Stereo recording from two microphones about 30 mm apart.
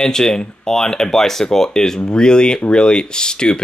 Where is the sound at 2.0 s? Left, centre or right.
Left.